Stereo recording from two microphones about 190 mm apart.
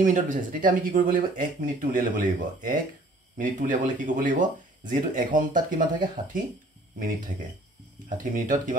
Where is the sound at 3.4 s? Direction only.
45° right (ahead or behind).